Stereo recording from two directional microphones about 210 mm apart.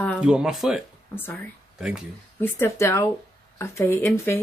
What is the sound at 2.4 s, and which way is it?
Speech, 10° left (ahead or behind).